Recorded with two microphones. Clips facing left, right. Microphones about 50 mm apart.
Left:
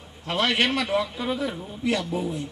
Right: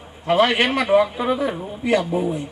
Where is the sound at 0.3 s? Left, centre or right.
Right.